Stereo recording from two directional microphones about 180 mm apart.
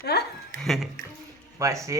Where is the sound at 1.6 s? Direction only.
15° right (ahead or behind).